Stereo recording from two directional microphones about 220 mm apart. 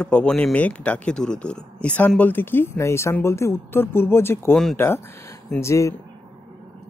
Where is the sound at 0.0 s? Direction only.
5° left (ahead or behind).